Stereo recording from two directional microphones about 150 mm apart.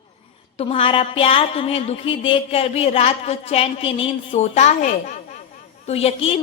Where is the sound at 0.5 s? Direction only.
35° left (ahead or behind).